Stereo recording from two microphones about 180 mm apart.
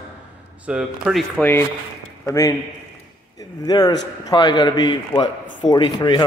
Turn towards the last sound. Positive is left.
turn(degrees=25)  # may be behind; listen again after turning